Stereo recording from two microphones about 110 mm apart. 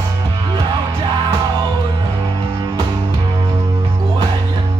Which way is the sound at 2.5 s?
35° right (ahead or behind).